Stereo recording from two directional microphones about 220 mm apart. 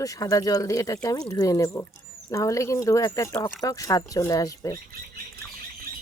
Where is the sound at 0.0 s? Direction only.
15° left (ahead or behind).